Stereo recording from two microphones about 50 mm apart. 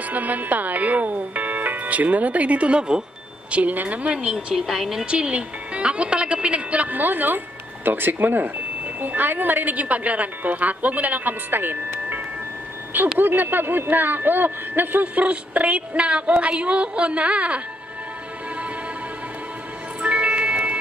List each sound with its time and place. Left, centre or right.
0.1 s a woman's voice: right
3.5 s a sound: right
4.6 s a woman's voice: centre
5.0 s a woman's voice: right
13.2 s a woman's voice: right
15.1 s a sound: right
20.0 s music: right